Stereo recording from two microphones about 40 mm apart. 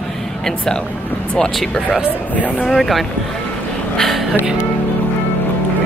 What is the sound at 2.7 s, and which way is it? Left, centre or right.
Speech, centre.